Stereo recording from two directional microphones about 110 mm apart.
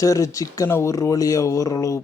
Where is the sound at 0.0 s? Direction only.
30° left (ahead or behind).